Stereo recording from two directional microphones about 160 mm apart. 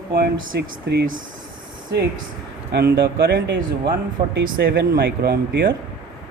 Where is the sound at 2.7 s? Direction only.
75° right (ahead or behind).